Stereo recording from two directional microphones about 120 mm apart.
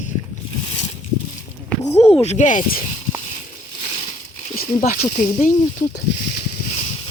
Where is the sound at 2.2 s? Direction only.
80° left.